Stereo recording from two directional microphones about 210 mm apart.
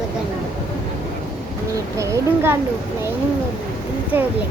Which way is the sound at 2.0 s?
10° right (ahead or behind).